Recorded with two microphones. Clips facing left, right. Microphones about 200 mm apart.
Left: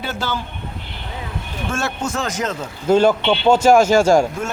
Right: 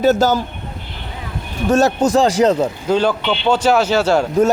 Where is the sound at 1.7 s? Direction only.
40° right (ahead or behind).